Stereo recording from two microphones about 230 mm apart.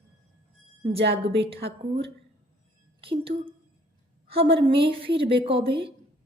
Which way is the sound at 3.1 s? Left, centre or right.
Right.